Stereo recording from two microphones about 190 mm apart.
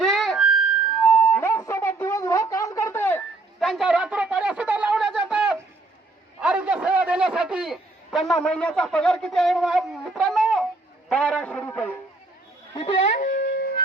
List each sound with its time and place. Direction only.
0.0 s music: centre (ahead or behind)
1.3 s a sound: 15° left (ahead or behind)
11.1 s music: 5° left (ahead or behind)
12.7 s dog: 30° left (ahead or behind); by 13.8 s 50° left (ahead or behind)